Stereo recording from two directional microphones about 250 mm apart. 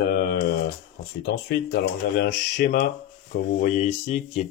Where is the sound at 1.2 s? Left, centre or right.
Left.